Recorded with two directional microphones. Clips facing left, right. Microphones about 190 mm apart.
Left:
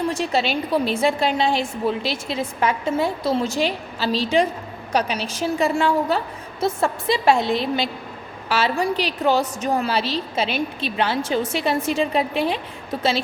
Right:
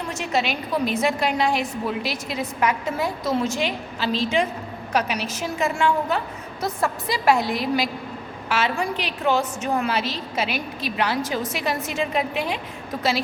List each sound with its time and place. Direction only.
0.1 s a woman's voice: 30° left (ahead or behind)